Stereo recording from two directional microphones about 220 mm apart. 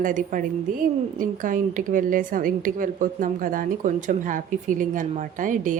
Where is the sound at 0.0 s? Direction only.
35° right (ahead or behind).